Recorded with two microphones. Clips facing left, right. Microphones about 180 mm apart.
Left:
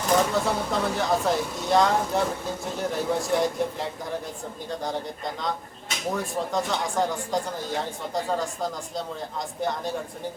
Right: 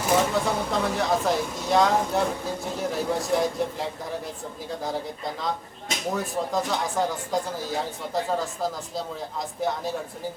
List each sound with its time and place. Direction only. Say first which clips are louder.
0.0 s speech: even; centre (ahead or behind)